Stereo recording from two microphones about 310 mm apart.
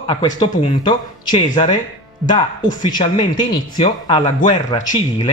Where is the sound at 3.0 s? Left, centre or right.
Centre.